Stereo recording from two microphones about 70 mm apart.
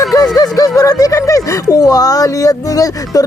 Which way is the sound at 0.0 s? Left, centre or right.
Left.